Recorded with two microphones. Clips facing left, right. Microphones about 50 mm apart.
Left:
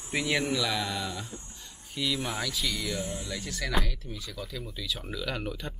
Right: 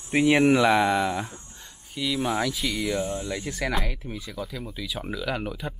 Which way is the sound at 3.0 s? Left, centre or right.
Right.